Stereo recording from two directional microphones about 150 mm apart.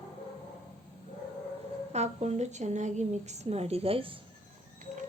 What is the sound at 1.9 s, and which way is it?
Speech, 45° right (ahead or behind).